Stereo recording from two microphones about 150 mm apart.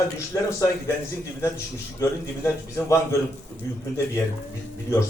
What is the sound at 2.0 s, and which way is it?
A man's voice, 15° left (ahead or behind).